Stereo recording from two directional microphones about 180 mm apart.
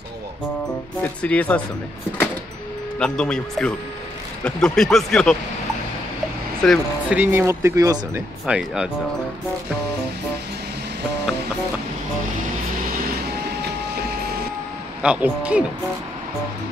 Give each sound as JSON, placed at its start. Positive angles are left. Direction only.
{"t": 1.0, "sound": "speech", "side_deg": 10}
{"t": 3.0, "sound": "speech", "side_deg": 5}
{"t": 6.6, "sound": "speech", "side_deg": 5}
{"t": 7.1, "sound": "speech", "side_deg": -10}
{"t": 8.5, "sound": "speech", "side_deg": -5}
{"t": 13.6, "sound": "train", "side_deg": -60}
{"t": 15.0, "sound": "speech", "side_deg": -5}